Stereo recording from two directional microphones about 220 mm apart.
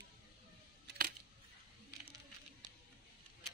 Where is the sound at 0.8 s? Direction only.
40° right (ahead or behind).